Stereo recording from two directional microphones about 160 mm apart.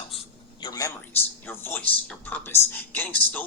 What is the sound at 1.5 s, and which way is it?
Speech, 15° left (ahead or behind).